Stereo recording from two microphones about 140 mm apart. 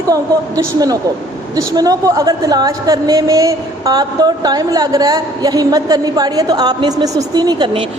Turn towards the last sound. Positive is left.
turn(degrees=-35)  # may be behind; listen again after turning